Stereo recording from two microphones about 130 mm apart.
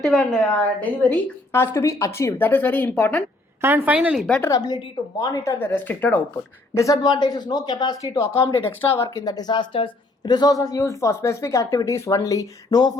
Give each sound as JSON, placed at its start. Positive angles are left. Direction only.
{"t": 0.0, "sound": "a woman's voice", "side_deg": 0}
{"t": 3.6, "sound": "a woman's voice", "side_deg": -15}
{"t": 4.4, "sound": "speech", "side_deg": 25}
{"t": 6.7, "sound": "speech", "side_deg": 25}
{"t": 9.0, "sound": "speech", "side_deg": 30}